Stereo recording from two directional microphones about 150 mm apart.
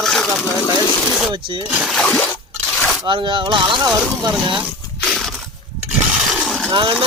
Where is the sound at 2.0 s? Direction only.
10° left (ahead or behind).